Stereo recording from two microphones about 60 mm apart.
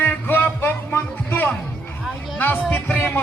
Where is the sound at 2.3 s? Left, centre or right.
Left.